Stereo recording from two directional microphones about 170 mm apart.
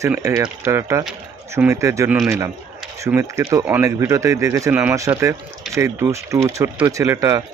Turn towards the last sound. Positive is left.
turn(degrees=-20)  # may be behind; listen again after turning